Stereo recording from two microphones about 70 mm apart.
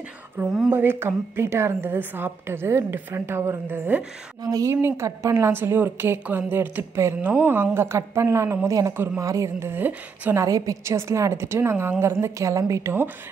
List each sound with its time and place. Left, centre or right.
0.7 s a woman's voice: right
4.4 s a woman's voice: right
4.8 s a woman's voice: right
7.0 s a woman's voice: right
7.2 s a woman's voice: right
8.9 s a woman's voice: right
9.2 s a woman's voice: right
9.6 s speech: right
10.3 s a woman's voice: right